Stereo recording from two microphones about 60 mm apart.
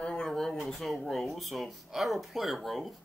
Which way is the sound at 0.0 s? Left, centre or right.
Centre.